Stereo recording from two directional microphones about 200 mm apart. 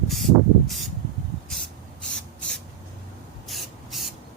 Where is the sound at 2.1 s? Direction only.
5° left (ahead or behind).